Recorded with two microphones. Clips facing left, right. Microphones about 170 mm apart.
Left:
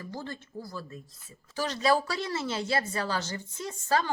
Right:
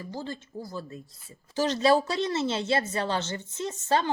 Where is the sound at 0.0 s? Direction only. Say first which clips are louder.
Right 3 dB; 15° right (ahead or behind).